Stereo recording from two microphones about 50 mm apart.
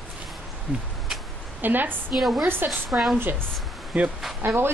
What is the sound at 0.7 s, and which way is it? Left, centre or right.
Speech, right.